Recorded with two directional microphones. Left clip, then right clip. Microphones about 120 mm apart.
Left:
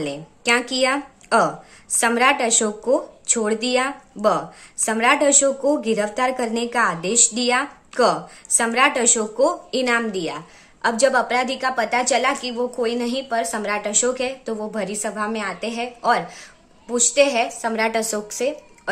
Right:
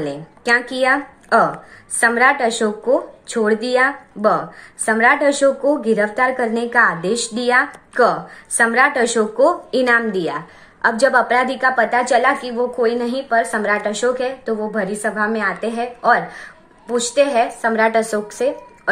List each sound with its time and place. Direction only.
0.0 s a woman's voice: 40° left (ahead or behind)
14.9 s a woman's voice: 35° left (ahead or behind)